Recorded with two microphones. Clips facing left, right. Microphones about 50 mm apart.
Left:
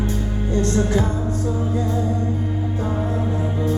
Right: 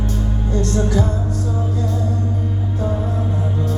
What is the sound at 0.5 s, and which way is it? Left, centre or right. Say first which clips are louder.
Music: even; left.